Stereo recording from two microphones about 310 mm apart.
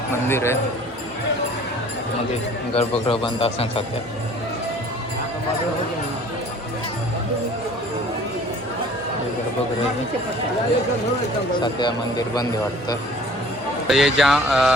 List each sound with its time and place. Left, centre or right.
0.3 s a man's voice: centre
2.7 s speech: centre
11.6 s a man's voice: centre
13.8 s speech: centre